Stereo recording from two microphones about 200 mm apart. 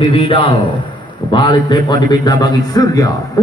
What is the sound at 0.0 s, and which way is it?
A man's voice, 25° left (ahead or behind).